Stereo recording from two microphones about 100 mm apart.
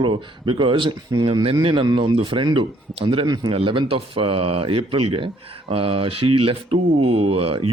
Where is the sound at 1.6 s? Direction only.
60° right (ahead or behind).